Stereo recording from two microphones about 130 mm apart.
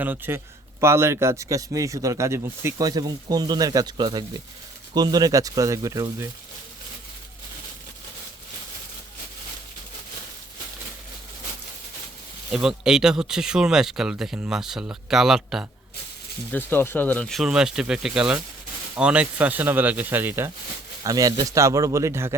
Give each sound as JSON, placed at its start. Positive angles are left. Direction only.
{"t": 0.0, "sound": "a man's voice", "side_deg": -15}
{"t": 12.5, "sound": "speech", "side_deg": -5}
{"t": 16.5, "sound": "speech", "side_deg": 15}
{"t": 21.0, "sound": "a man's voice", "side_deg": -25}